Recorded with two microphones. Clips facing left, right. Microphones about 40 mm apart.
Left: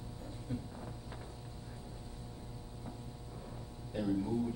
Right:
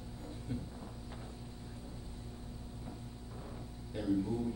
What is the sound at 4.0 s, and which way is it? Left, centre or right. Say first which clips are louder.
Speech: right 1 dB; centre.